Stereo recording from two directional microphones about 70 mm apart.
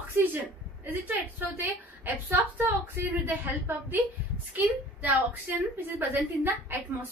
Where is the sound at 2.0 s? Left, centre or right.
Right.